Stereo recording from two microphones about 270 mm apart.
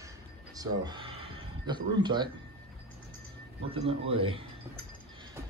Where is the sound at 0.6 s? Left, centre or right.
Centre.